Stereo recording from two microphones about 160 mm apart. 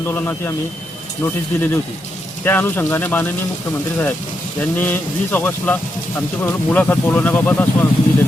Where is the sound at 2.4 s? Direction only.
15° left (ahead or behind).